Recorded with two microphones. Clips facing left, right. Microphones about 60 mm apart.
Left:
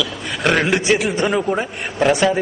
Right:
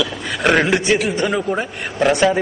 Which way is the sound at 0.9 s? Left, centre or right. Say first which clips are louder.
Even; centre.